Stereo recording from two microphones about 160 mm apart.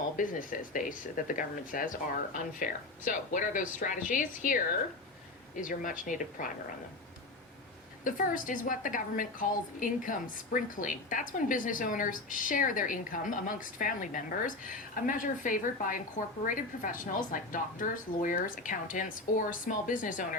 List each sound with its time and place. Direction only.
0.2 s a woman's voice: 55° left (ahead or behind)
8.0 s a woman's voice: 55° left (ahead or behind)